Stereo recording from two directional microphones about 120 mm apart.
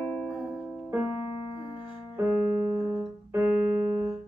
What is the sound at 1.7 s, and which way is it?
Keyboard, 15° right (ahead or behind).